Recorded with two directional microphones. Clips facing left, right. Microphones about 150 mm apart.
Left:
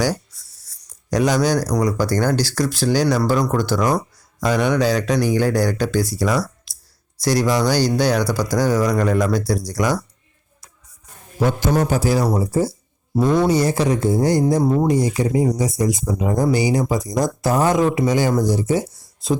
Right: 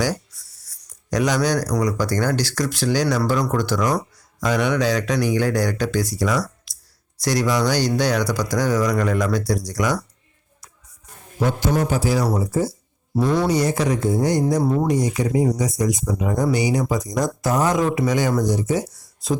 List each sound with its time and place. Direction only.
0.0 s writing: 30° left (ahead or behind)
1.1 s speech: 30° left (ahead or behind)
11.7 s speech: 40° left (ahead or behind)
13.1 s speech: 20° left (ahead or behind)